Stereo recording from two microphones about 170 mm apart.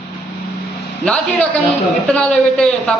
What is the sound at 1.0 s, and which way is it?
A man's voice, 5° left (ahead or behind).